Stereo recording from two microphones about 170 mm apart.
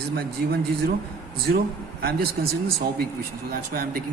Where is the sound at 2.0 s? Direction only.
65° right (ahead or behind).